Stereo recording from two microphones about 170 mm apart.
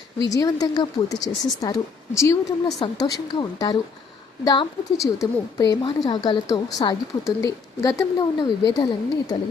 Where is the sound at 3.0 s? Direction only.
25° left (ahead or behind).